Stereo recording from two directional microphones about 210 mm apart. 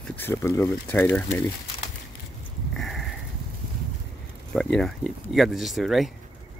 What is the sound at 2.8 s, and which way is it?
Dog, centre (ahead or behind).